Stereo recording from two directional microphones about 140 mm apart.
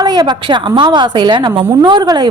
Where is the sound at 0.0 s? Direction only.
30° right (ahead or behind).